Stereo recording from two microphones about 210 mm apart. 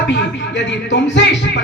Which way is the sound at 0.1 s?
55° left (ahead or behind).